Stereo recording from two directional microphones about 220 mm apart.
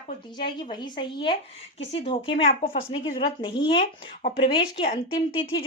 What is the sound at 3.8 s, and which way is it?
Speech, 40° left (ahead or behind).